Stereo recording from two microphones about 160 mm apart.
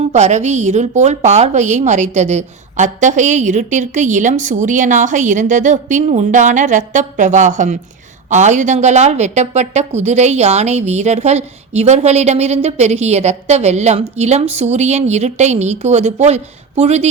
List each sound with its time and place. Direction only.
0.0 s speech: 45° right (ahead or behind)